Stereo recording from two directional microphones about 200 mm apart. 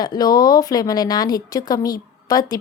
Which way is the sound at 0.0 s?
20° left (ahead or behind).